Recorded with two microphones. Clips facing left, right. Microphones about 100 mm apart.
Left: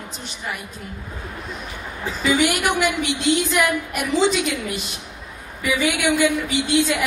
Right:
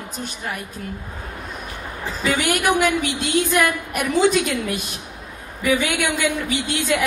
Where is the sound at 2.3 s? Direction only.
45° right (ahead or behind).